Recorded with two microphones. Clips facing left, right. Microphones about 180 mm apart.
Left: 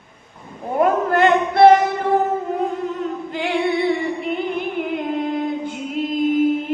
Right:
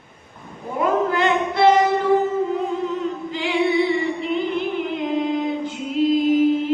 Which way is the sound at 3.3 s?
55° left (ahead or behind).